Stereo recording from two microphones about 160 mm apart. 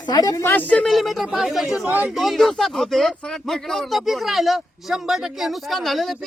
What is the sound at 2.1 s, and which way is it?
Speech, centre (ahead or behind).